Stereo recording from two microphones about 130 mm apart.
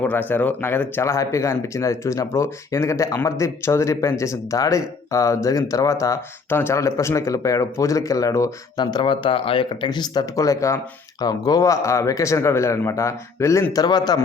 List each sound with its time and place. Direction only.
0.0 s speech: 15° left (ahead or behind); by 14.2 s 30° left (ahead or behind)